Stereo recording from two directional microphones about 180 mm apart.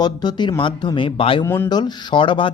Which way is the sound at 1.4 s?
10° left (ahead or behind).